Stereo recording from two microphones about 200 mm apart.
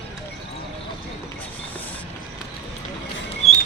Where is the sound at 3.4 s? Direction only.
30° left (ahead or behind).